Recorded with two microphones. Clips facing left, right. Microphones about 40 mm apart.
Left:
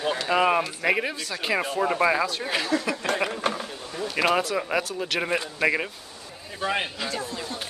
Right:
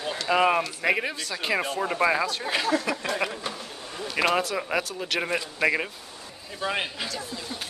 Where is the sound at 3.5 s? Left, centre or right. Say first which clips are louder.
Left 7 dB; left.